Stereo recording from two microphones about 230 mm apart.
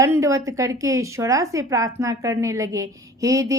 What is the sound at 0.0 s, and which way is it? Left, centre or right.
A woman's voice, centre.